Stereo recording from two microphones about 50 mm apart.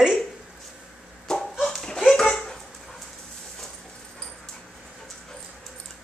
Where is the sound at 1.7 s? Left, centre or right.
Centre.